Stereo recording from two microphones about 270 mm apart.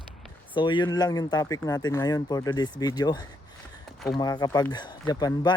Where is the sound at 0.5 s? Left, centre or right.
Centre.